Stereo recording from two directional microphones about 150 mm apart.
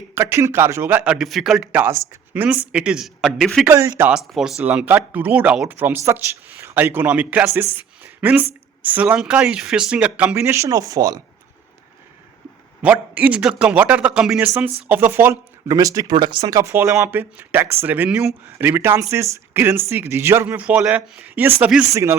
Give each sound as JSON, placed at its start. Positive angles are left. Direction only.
{"t": 0.1, "sound": "a man's voice", "side_deg": -15}
{"t": 3.7, "sound": "speech", "side_deg": -15}
{"t": 4.1, "sound": "a man's voice", "side_deg": -5}
{"t": 4.7, "sound": "speech", "side_deg": -15}
{"t": 12.8, "sound": "speech", "side_deg": -10}